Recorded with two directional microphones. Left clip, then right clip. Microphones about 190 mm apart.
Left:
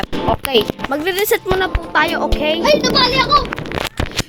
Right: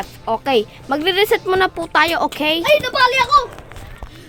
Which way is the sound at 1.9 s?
30° right (ahead or behind).